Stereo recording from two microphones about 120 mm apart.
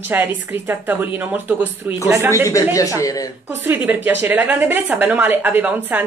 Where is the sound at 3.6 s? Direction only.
15° right (ahead or behind).